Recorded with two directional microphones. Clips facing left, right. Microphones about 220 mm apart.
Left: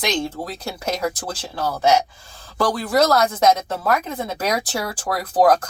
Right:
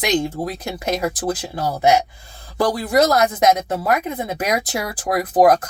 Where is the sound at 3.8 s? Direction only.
20° right (ahead or behind).